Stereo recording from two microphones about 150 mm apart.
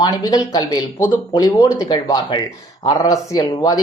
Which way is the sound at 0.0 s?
25° left (ahead or behind).